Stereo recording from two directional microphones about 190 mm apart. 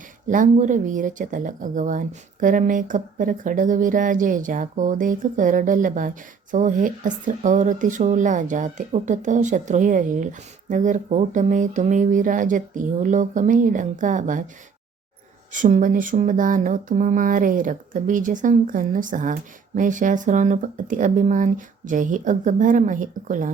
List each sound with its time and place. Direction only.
0.3 s speech: 40° right (ahead or behind)
15.5 s speech: 40° right (ahead or behind)